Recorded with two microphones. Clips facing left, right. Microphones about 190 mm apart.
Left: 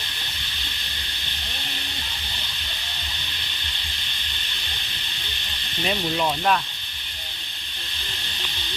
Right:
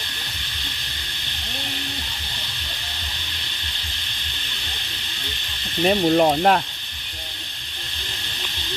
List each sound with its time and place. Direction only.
5.8 s speech: 45° right (ahead or behind)